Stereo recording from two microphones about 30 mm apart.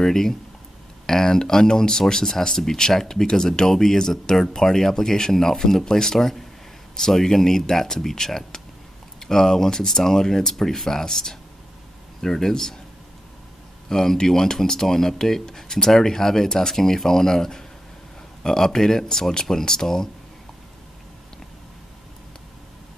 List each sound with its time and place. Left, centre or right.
0.0 s speech: centre
6.1 s speech: centre
13.8 s speech: centre